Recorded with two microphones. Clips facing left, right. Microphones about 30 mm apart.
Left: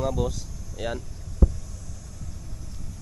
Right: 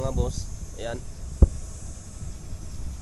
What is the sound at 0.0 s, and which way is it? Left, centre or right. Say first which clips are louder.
Speech: left 3 dB; centre.